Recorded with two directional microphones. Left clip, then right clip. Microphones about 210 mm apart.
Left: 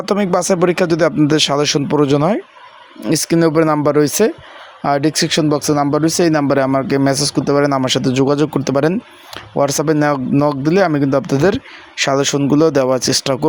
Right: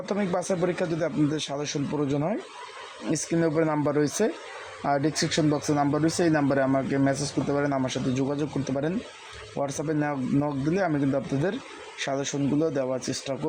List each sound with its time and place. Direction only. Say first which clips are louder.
0.0 s speech: left 12 dB; 40° left (ahead or behind)